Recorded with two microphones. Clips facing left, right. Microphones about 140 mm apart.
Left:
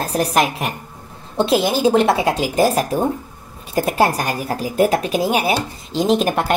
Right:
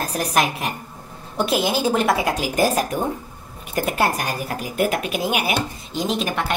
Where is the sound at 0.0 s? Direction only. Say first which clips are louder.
Left 3 dB; 35° left (ahead or behind).